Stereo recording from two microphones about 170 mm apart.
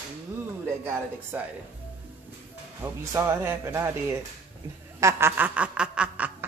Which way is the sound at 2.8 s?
15° right (ahead or behind).